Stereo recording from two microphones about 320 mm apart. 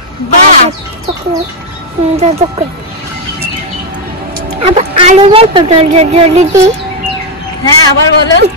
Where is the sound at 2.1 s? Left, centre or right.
Centre.